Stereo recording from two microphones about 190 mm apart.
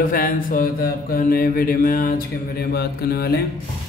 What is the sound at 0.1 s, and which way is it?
Mantra, 50° left (ahead or behind).